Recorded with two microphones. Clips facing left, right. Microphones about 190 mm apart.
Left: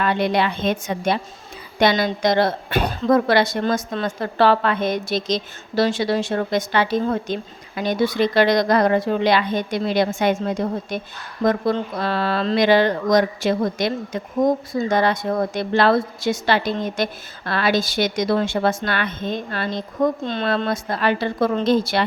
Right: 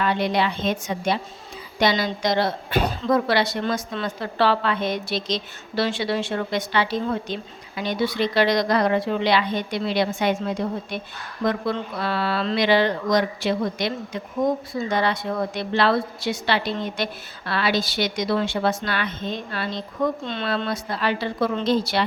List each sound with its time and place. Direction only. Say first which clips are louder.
0.0 s a woman's voice: left 2 dB; 55° left (ahead or behind)